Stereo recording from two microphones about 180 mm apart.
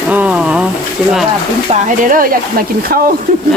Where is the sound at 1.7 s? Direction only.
50° right (ahead or behind).